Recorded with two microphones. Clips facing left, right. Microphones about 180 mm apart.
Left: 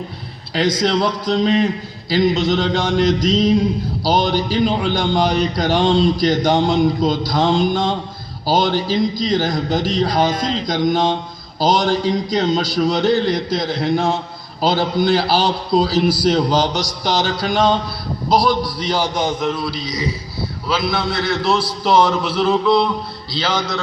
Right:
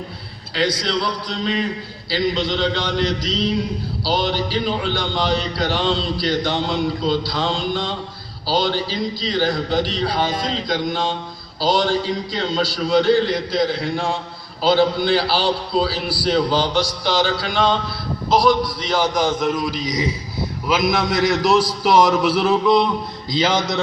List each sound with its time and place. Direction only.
0.5 s a man's voice: 45° left (ahead or behind)
19.0 s a man's voice: 25° left (ahead or behind)
19.4 s a man's voice: 10° right (ahead or behind)